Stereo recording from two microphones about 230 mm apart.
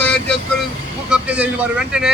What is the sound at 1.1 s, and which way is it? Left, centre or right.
Speech, centre.